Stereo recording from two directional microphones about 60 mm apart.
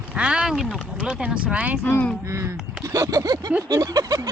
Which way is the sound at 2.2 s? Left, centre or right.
Right.